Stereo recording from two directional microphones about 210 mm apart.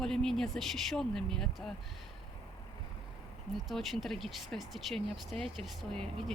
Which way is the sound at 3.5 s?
Centre (ahead or behind).